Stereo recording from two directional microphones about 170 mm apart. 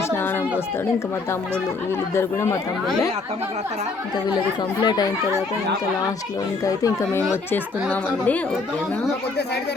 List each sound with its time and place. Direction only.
2.1 s a woman's voice: 15° left (ahead or behind)
4.8 s speech: 25° left (ahead or behind)
6.7 s a woman's voice: 20° left (ahead or behind)